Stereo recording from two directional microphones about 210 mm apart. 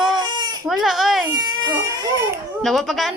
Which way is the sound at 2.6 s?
Centre (ahead or behind).